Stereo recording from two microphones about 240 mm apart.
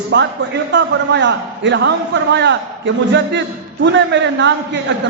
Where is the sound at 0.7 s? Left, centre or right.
Right.